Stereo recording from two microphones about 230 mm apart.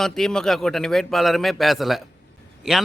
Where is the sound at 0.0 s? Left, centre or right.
Centre.